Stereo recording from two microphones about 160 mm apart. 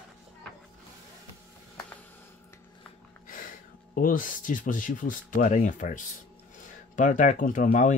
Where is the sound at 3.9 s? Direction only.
60° left (ahead or behind).